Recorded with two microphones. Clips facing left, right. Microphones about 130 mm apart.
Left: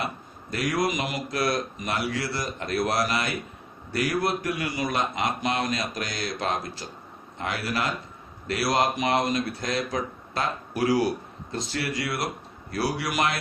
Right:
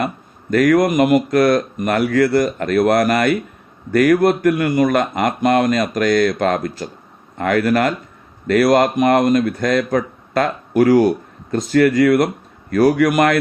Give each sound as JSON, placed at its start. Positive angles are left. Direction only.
{"t": 0.5, "sound": "a man's voice", "side_deg": -55}